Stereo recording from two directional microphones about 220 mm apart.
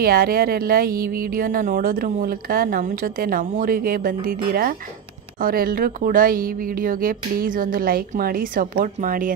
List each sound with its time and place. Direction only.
0.0 s speech: 40° right (ahead or behind)